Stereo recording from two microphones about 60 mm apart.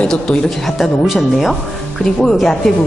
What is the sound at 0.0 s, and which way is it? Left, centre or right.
Speech, centre.